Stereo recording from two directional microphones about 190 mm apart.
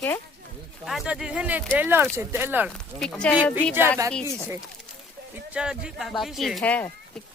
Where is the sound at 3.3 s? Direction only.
10° right (ahead or behind).